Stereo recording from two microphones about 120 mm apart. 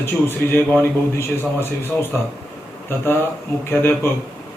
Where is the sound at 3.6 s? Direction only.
20° left (ahead or behind).